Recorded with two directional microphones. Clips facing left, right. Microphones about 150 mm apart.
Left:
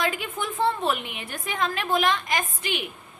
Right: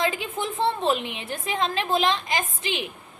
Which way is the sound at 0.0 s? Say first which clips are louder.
Right 2 dB; 25° right (ahead or behind).